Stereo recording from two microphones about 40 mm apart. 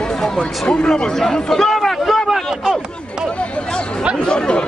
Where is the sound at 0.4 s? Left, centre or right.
Left; by 2.4 s centre.